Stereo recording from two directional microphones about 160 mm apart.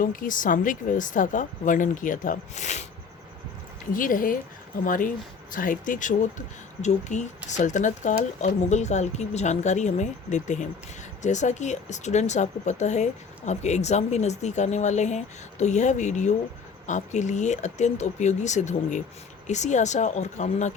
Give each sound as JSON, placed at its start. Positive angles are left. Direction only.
{"t": 0.0, "sound": "speech", "side_deg": 60}
{"t": 3.9, "sound": "speech", "side_deg": 60}